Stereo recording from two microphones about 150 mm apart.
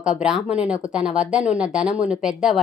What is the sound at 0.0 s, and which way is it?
A woman's voice, 5° right (ahead or behind).